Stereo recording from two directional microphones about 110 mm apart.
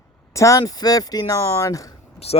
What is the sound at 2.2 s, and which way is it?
Speech, 70° left (ahead or behind).